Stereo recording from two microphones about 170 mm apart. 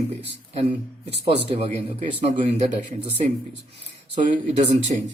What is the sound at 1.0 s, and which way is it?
Speech, 35° right (ahead or behind).